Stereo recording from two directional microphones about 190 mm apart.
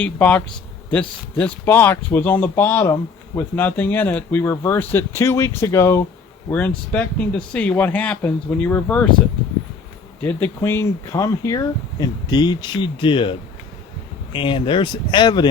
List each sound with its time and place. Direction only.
0.0 s speech: 5° left (ahead or behind)
10.2 s speech: 10° left (ahead or behind); by 13.3 s 25° left (ahead or behind)
14.3 s speech: 25° left (ahead or behind)